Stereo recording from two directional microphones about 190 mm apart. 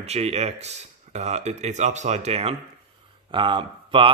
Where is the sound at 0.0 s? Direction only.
35° right (ahead or behind).